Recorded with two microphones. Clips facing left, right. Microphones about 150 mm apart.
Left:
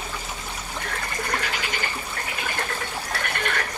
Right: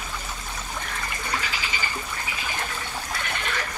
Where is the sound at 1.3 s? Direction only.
60° left (ahead or behind).